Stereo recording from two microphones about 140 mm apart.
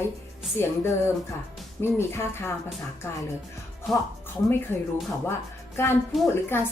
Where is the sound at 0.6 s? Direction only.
15° left (ahead or behind).